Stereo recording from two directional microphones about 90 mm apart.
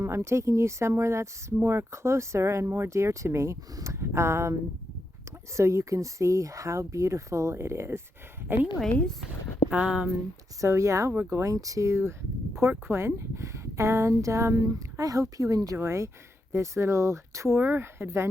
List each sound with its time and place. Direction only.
0.0 s speech: 30° right (ahead or behind)
5.5 s speech: 30° right (ahead or behind)
8.4 s speech: 20° right (ahead or behind)
10.6 s speech: 35° right (ahead or behind)
15.8 s speech: 30° right (ahead or behind)